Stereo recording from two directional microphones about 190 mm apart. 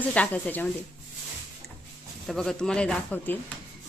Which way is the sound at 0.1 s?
10° left (ahead or behind).